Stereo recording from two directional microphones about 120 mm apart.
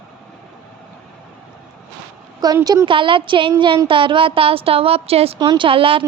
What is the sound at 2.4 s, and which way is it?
Speech, 30° right (ahead or behind).